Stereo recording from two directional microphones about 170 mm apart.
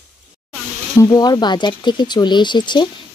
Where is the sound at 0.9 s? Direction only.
20° left (ahead or behind).